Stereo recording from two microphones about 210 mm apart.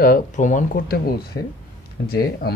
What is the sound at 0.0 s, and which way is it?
Speech, 40° left (ahead or behind).